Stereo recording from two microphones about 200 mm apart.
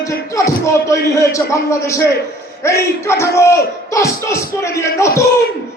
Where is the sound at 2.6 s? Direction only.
15° left (ahead or behind).